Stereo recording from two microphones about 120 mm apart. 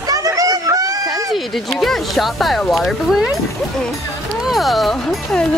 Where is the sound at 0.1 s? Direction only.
30° right (ahead or behind).